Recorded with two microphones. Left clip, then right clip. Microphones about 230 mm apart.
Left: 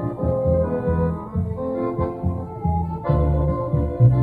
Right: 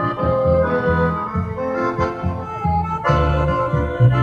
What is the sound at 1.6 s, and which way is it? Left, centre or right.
Music, centre.